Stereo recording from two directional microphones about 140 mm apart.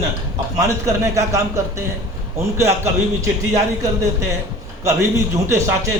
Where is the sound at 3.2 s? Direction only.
25° right (ahead or behind).